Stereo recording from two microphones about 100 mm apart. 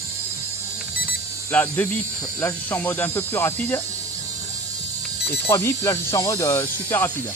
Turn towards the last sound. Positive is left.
turn(degrees=25)  # may be behind; listen again after turning